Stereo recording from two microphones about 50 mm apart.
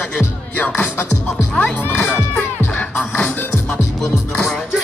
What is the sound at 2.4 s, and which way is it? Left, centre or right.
Music, left.